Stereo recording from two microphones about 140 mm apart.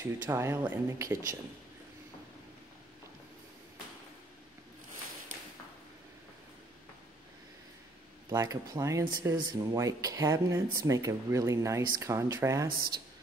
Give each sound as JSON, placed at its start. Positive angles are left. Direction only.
{"t": 0.0, "sound": "speech", "side_deg": -20}
{"t": 8.3, "sound": "speech", "side_deg": -25}